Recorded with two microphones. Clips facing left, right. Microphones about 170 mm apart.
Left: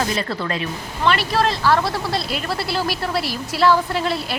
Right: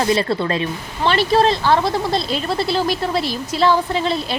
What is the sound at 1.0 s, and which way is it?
A woman's voice, 25° right (ahead or behind).